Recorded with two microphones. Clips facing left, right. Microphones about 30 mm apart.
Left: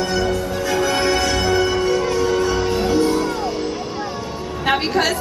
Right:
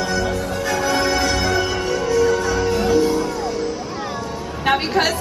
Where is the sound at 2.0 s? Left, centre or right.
Centre.